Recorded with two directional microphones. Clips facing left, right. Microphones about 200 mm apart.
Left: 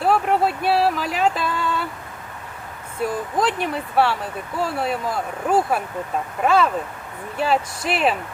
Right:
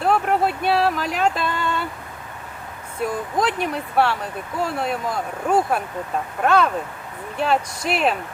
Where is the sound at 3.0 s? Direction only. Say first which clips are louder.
Even; centre (ahead or behind).